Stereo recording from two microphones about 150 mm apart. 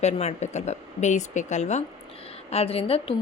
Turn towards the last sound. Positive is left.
turn(degrees=40)  # may be behind; listen again after turning